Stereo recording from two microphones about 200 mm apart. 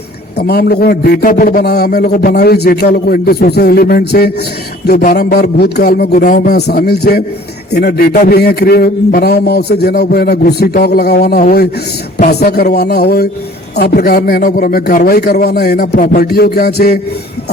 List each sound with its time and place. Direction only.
0.3 s a man's voice: 50° left (ahead or behind)